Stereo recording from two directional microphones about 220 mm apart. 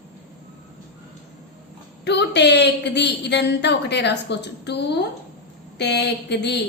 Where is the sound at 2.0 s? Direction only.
50° left (ahead or behind).